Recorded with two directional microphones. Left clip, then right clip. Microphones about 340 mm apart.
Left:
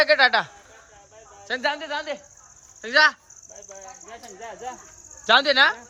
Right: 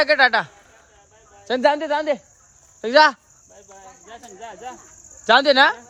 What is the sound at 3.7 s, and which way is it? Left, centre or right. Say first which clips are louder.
Speech: even; centre.